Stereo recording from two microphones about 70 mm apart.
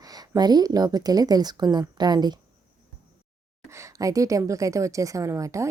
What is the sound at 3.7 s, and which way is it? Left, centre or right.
A woman's voice, right.